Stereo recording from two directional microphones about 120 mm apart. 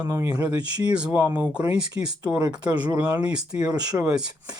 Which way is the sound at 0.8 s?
10° right (ahead or behind).